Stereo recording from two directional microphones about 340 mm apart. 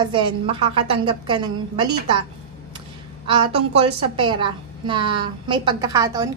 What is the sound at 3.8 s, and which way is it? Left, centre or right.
A woman's voice, centre.